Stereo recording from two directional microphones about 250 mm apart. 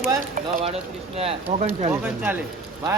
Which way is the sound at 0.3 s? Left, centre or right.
Right.